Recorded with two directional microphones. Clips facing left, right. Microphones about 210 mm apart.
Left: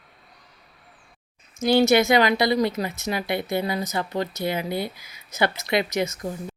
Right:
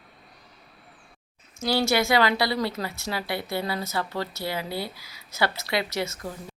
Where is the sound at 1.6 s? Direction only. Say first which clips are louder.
Left 6 dB; 20° left (ahead or behind).